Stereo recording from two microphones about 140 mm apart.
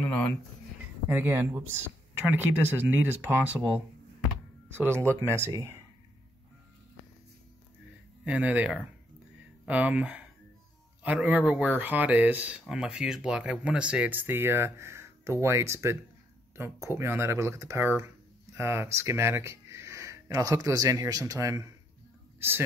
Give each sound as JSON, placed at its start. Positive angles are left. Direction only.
{"t": 0.0, "sound": "a sound", "side_deg": 10}
{"t": 1.1, "sound": "speech", "side_deg": -15}
{"t": 8.3, "sound": "speech", "side_deg": -10}